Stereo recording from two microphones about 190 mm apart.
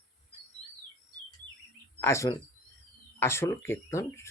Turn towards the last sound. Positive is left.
turn(degrees=15)  # may be behind; listen again after turning